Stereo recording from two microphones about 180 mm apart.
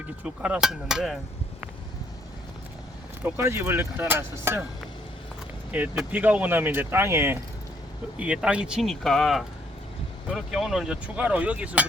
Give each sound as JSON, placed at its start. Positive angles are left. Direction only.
{"t": 0.4, "sound": "speech", "side_deg": -5}
{"t": 3.2, "sound": "speech", "side_deg": -15}
{"t": 5.7, "sound": "speech", "side_deg": -10}